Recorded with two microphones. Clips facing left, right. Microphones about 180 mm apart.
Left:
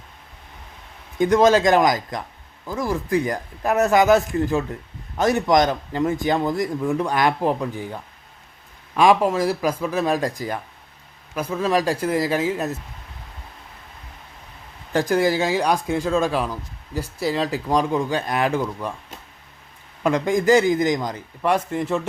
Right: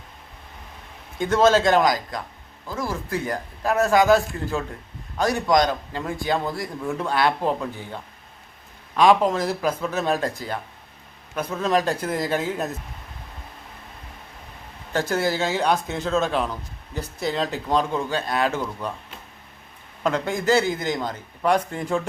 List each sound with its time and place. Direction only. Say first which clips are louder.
1.2 s speech: left 2 dB; 15° left (ahead or behind)
9.0 s speech: left 1 dB; 10° left (ahead or behind)
14.9 s speech: left 4 dB; 15° left (ahead or behind)
20.0 s speech: left 4 dB; 10° left (ahead or behind)